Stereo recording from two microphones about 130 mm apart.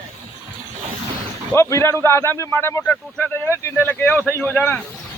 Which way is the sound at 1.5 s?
20° left (ahead or behind).